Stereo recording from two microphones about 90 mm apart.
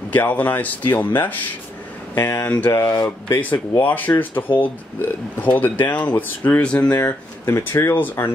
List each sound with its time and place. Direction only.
0.1 s speech: 20° left (ahead or behind)
2.1 s speech: 30° left (ahead or behind)
2.7 s speech: 45° left (ahead or behind)
3.3 s speech: 15° left (ahead or behind)
6.9 s speech: 25° left (ahead or behind)